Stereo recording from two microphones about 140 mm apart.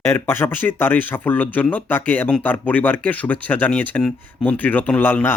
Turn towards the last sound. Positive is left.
turn(degrees=15)  # may be behind; listen again after turning